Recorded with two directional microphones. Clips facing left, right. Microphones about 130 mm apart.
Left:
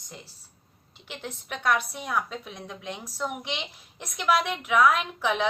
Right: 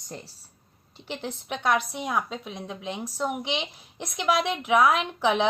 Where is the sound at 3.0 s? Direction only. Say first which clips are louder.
Right 4 dB; 30° right (ahead or behind).